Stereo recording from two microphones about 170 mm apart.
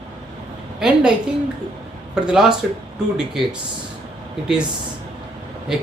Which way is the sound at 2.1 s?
5° right (ahead or behind).